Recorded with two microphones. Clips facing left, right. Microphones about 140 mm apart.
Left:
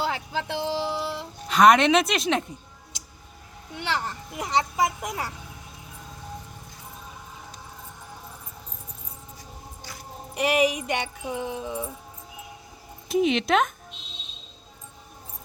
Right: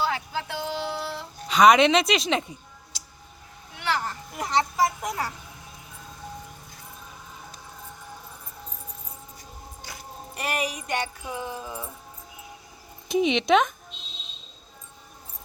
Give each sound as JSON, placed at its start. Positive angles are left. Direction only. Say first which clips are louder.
{"t": 0.0, "sound": "music", "louder": "even", "side_deg": 20}
{"t": 1.5, "sound": "speech", "louder": "even", "side_deg": 0}
{"t": 3.8, "sound": "a sound", "louder": "right 1 dB", "side_deg": 20}
{"t": 10.4, "sound": "music", "louder": "left 7 dB", "side_deg": 90}
{"t": 11.3, "sound": "music", "louder": "left 3 dB", "side_deg": 20}
{"t": 13.1, "sound": "speech", "louder": "right 1 dB", "side_deg": 5}